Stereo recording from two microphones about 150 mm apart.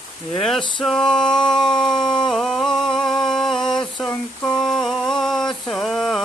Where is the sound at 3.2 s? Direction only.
5° left (ahead or behind).